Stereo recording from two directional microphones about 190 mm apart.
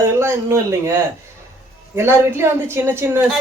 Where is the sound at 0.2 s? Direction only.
15° right (ahead or behind).